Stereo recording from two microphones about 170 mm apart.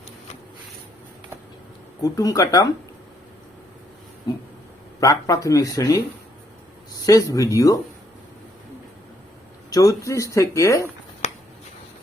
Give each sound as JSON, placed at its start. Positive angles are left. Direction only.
{"t": 2.0, "sound": "speech", "side_deg": 20}
{"t": 4.9, "sound": "speech", "side_deg": 20}
{"t": 7.0, "sound": "speech", "side_deg": 20}
{"t": 9.6, "sound": "a sound", "side_deg": 20}
{"t": 10.0, "sound": "speech", "side_deg": 20}
{"t": 11.2, "sound": "a sound", "side_deg": 40}